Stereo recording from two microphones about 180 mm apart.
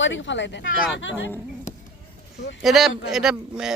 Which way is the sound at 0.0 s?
90° left.